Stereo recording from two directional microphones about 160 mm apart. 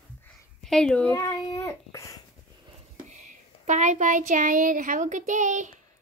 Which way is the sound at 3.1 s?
50° right (ahead or behind).